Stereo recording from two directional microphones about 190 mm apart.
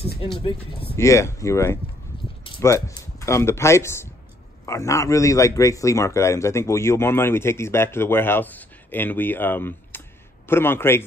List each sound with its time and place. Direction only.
0.2 s speech: 30° left (ahead or behind)
0.9 s a man's voice: 15° left (ahead or behind)